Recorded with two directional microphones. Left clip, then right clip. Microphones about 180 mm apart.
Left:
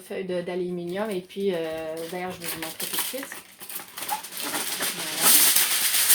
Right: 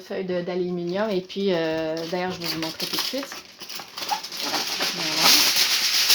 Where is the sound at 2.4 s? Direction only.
10° right (ahead or behind).